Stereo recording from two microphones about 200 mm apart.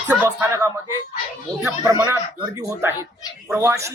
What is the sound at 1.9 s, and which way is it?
Speech, 15° right (ahead or behind).